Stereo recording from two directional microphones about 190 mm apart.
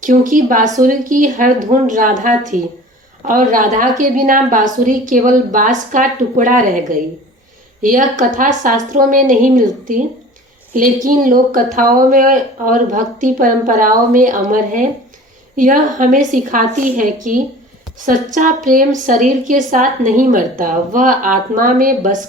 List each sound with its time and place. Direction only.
0.0 s speech: 45° right (ahead or behind)
7.8 s a woman's voice: 45° right (ahead or behind)